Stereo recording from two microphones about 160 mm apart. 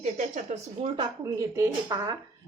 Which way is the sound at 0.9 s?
20° right (ahead or behind).